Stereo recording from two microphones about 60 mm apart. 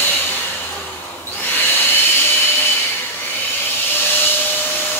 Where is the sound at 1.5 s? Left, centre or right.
Left.